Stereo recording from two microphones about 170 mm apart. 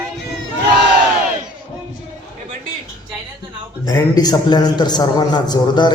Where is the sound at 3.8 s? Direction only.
20° left (ahead or behind).